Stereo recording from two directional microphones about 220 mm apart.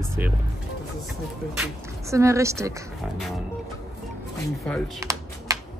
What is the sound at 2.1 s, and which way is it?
Speech, 15° right (ahead or behind).